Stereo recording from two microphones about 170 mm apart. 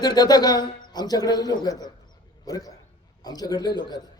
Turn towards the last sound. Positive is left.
turn(degrees=25)  # may be behind; listen again after turning